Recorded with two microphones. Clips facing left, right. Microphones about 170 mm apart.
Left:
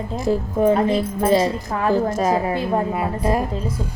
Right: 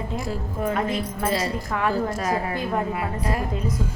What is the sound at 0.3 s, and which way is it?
A woman's voice, 30° left (ahead or behind).